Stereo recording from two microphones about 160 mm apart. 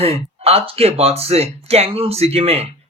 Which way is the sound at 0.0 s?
40° right (ahead or behind).